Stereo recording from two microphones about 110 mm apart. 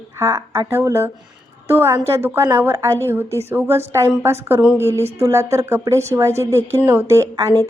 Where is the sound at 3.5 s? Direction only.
20° right (ahead or behind).